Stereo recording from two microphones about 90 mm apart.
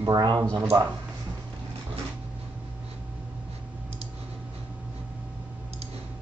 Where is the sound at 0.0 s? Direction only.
55° right (ahead or behind).